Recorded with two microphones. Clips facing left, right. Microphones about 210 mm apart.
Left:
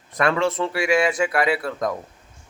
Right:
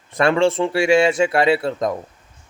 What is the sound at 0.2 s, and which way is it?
Speech, 30° right (ahead or behind).